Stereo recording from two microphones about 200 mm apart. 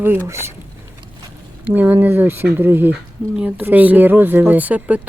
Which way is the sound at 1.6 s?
10° right (ahead or behind).